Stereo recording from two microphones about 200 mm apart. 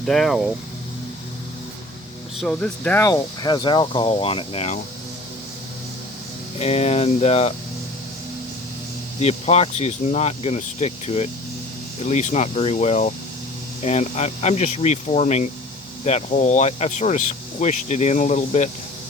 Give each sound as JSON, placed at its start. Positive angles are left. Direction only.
{"t": 0.0, "sound": "speech", "side_deg": 0}
{"t": 2.4, "sound": "speech", "side_deg": 5}
{"t": 6.6, "sound": "speech", "side_deg": 30}
{"t": 9.2, "sound": "speech", "side_deg": 30}